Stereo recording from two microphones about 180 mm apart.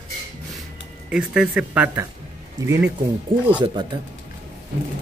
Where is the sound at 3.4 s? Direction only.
25° right (ahead or behind).